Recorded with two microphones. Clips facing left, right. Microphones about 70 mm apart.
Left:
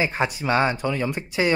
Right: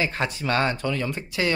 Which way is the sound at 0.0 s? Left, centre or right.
Centre.